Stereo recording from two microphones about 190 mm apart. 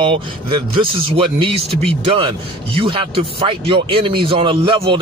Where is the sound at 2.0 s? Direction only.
30° right (ahead or behind).